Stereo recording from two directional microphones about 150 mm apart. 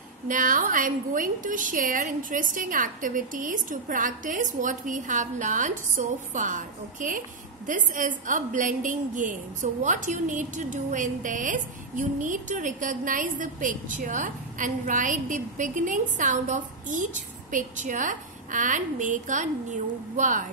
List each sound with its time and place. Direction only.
0.3 s a woman's voice: 60° right (ahead or behind)